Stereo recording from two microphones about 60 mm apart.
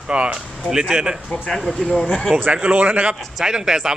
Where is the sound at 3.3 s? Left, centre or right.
Centre.